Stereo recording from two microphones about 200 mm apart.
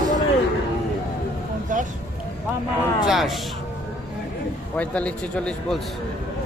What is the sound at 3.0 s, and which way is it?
Speech, centre (ahead or behind).